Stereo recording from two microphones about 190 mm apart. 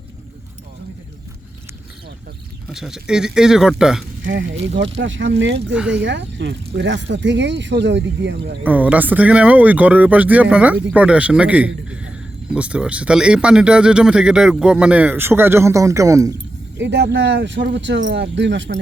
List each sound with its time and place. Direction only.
2.6 s speech: 5° right (ahead or behind)
4.3 s speech: 70° right (ahead or behind)
5.7 s speech: 5° right (ahead or behind)
6.0 s speech: 70° right (ahead or behind)
8.6 s speech: 10° right (ahead or behind)
16.7 s speech: 65° right (ahead or behind)